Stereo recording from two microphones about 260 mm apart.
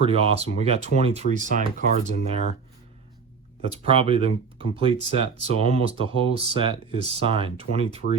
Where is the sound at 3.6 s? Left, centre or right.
Right.